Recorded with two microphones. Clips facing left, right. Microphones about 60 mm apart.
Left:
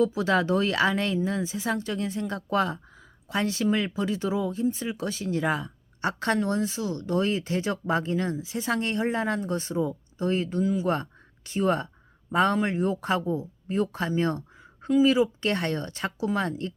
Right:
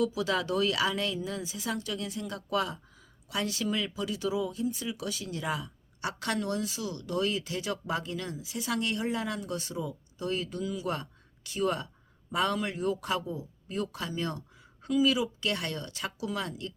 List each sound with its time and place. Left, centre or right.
0.0 s speech: left